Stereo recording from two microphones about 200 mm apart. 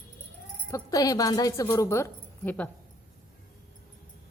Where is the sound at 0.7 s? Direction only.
15° left (ahead or behind).